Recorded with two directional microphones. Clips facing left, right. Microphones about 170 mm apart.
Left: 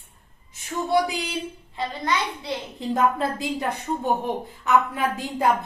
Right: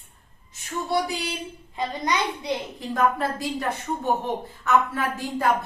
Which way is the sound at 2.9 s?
20° left (ahead or behind).